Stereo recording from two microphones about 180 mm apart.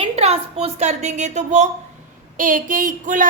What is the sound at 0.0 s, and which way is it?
A woman's voice, 35° right (ahead or behind).